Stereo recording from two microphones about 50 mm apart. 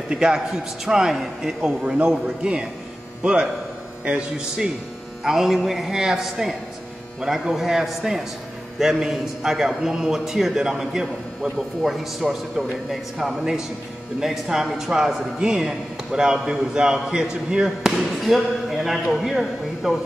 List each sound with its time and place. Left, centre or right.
0.1 s a man's voice: centre
5.2 s a man's voice: centre